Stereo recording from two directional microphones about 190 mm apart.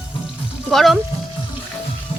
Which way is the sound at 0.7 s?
Centre (ahead or behind).